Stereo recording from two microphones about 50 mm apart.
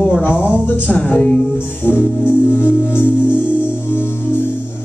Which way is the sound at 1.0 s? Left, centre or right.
Left.